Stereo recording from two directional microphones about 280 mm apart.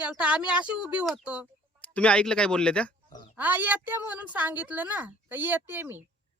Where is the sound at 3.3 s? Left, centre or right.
Centre.